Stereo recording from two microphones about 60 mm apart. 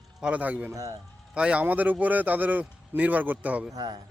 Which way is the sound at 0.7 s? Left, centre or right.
Right.